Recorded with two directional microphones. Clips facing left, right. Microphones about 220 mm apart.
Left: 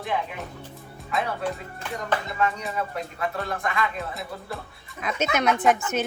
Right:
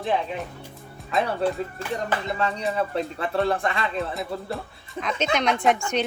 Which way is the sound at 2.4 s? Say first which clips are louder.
Right 2 dB; 30° right (ahead or behind).